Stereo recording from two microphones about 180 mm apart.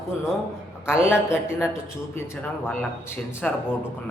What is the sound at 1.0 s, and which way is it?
Speech, 15° left (ahead or behind).